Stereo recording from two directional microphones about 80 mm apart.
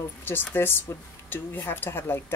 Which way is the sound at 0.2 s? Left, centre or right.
Left.